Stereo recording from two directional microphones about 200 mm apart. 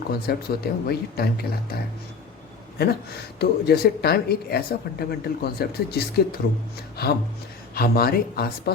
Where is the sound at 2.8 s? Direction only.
50° left (ahead or behind).